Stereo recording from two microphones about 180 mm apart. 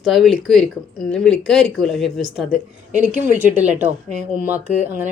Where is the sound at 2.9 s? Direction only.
45° right (ahead or behind).